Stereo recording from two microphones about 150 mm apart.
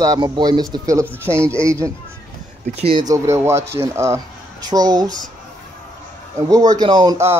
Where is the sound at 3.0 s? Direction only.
20° right (ahead or behind).